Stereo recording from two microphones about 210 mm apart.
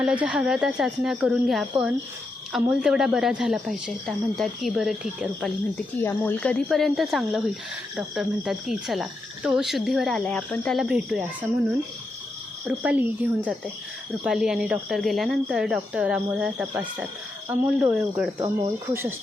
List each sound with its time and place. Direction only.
0.0 s a woman's voice: 5° right (ahead or behind)
12.6 s a woman's voice: 5° right (ahead or behind)
18.3 s speech: 15° right (ahead or behind)